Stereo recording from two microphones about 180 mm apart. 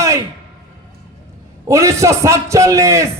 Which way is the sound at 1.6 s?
15° right (ahead or behind).